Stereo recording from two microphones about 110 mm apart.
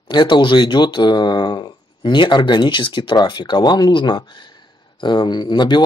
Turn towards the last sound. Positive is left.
turn(degrees=45)  # may be behind; listen again after turning